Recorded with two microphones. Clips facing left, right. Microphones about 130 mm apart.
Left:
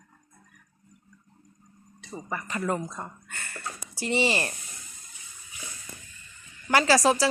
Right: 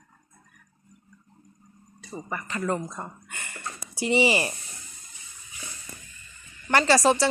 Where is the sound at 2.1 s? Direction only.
5° right (ahead or behind).